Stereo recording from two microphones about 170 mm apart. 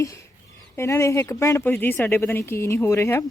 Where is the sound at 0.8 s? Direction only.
15° left (ahead or behind).